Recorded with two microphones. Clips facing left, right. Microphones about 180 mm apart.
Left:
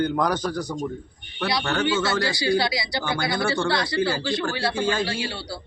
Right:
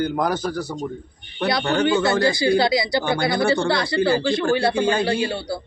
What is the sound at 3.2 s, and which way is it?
Speech, 55° right (ahead or behind).